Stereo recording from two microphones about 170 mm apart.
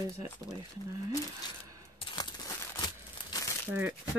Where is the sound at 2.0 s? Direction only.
25° left (ahead or behind).